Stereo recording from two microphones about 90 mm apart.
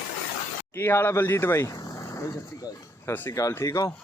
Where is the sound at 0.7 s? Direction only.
25° left (ahead or behind).